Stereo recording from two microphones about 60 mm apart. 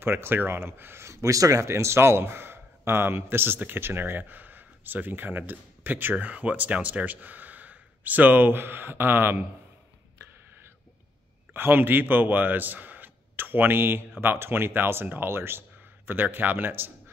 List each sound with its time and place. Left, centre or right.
0.0 s speech: right
11.5 s speech: right